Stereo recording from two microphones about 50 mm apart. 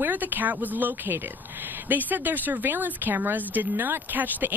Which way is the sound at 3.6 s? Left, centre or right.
Right.